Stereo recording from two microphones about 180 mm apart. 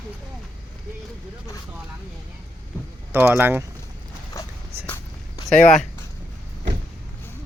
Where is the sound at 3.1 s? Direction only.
10° right (ahead or behind).